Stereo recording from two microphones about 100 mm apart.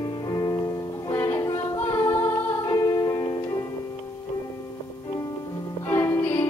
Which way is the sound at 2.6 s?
40° left (ahead or behind).